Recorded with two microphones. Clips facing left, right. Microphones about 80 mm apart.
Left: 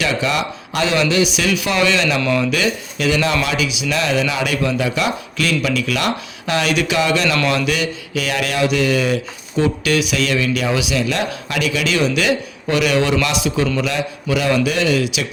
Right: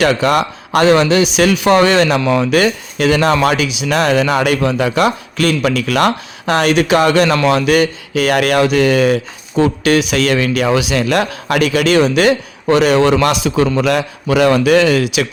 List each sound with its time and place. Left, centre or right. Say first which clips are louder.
0.0 s speech: right 7 dB; right
2.2 s speech: right 4 dB; right
2.5 s speech: right 6 dB; right
7.3 s speech: right 5 dB; right
7.7 s a man's voice: right 8 dB; right